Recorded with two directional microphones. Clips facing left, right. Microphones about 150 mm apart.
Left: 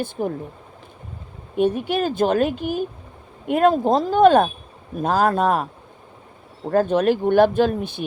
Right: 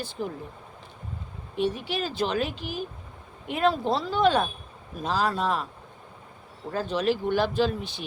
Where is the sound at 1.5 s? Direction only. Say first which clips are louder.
Left 8 dB; 55° left (ahead or behind).